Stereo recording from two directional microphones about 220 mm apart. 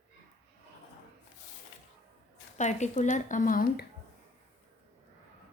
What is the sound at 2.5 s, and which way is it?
Speech, 30° left (ahead or behind).